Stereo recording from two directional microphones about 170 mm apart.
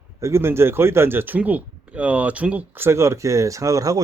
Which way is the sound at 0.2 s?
15° right (ahead or behind).